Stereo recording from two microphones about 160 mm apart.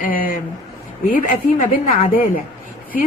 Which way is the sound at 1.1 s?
45° left (ahead or behind).